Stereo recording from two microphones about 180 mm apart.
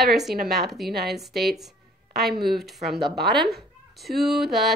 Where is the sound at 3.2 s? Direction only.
65° right (ahead or behind).